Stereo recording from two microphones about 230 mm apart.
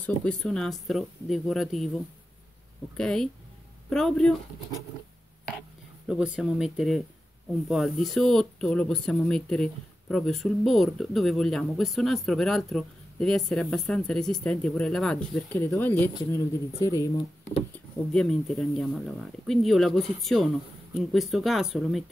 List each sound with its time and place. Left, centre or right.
0.0 s speech: centre
3.0 s speech: centre
6.0 s speech: centre